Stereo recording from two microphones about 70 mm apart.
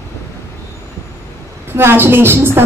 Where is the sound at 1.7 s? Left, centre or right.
Right.